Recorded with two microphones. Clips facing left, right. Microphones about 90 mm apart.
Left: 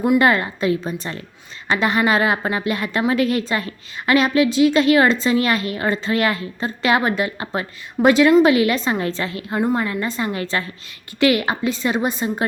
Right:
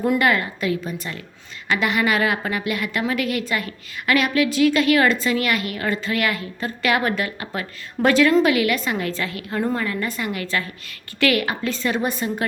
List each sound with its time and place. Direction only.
0.2 s a woman's voice: 30° left (ahead or behind)